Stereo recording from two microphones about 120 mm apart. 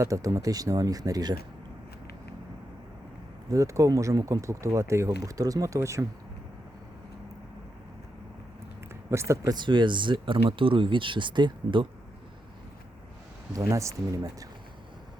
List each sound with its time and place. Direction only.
0.0 s speech: 30° right (ahead or behind)
3.5 s speech: 25° right (ahead or behind)
9.0 s speech: 25° right (ahead or behind); by 11.9 s 40° right (ahead or behind)
13.5 s speech: 25° right (ahead or behind)